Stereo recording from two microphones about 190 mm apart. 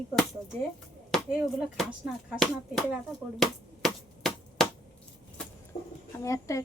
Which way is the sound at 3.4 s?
5° left (ahead or behind).